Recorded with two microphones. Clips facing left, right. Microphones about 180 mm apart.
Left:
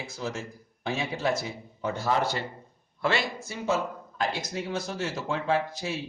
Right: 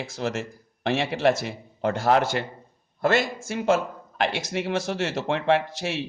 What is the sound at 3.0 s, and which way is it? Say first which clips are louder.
Speech: right 5 dB; 45° right (ahead or behind).